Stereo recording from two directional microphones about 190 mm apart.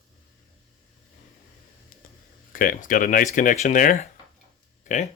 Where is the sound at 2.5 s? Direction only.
45° left (ahead or behind).